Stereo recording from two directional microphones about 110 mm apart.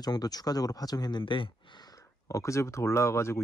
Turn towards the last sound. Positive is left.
turn(degrees=25)  # may be behind; listen again after turning